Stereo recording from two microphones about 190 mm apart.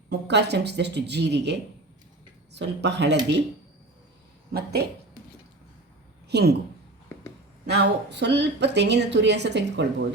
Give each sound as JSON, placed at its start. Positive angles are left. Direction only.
{"t": 0.1, "sound": "a woman's voice", "side_deg": -60}
{"t": 4.5, "sound": "a woman's voice", "side_deg": -55}
{"t": 6.2, "sound": "a woman's voice", "side_deg": -60}
{"t": 7.7, "sound": "a woman's voice", "side_deg": -60}